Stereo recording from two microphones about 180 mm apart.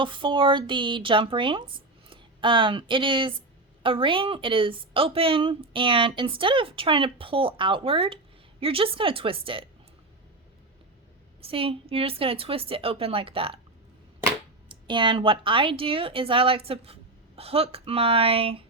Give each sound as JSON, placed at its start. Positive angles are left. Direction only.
{"t": 0.0, "sound": "a woman's voice", "side_deg": -25}
{"t": 11.3, "sound": "a woman's voice", "side_deg": -30}
{"t": 14.7, "sound": "a woman's voice", "side_deg": -25}